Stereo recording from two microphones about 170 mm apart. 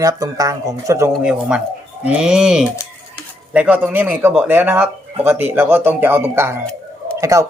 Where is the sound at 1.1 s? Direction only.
5° right (ahead or behind).